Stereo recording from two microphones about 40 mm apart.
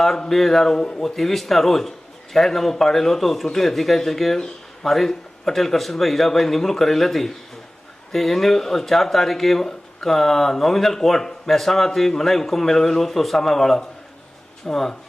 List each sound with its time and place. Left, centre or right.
0.2 s speech: centre
0.8 s a man's voice: left
1.0 s a man's voice: centre